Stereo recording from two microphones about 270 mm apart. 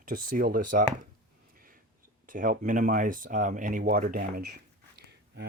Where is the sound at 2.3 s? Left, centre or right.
Right.